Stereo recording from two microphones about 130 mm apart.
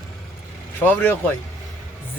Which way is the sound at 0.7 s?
15° left (ahead or behind).